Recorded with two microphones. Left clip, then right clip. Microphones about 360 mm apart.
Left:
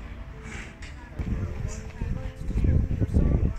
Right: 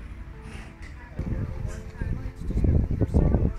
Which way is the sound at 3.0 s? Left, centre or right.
Right.